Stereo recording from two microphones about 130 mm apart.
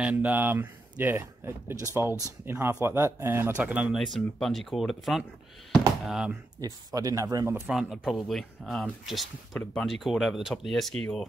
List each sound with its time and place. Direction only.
0.0 s speech: 10° right (ahead or behind)
5.7 s a sound: 5° right (ahead or behind)
6.6 s speech: 30° right (ahead or behind)
7.7 s speech: centre (ahead or behind)